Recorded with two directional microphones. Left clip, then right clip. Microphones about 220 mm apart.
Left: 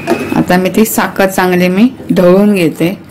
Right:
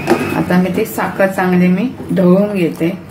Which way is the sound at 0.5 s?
45° left (ahead or behind).